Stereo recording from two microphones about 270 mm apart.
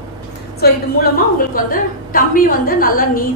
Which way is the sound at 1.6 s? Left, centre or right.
Left.